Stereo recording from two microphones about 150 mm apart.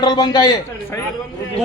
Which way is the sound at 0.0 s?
30° left (ahead or behind).